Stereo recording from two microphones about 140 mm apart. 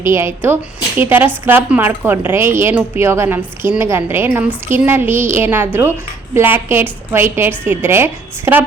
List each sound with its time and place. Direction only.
0.0 s a woman's voice: 20° right (ahead or behind)